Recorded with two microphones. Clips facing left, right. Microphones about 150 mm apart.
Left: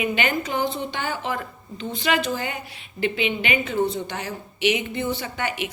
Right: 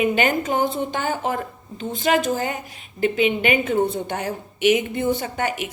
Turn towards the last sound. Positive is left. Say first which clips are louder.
# right 3 dB
turn(degrees=-45)  # may be behind; listen again after turning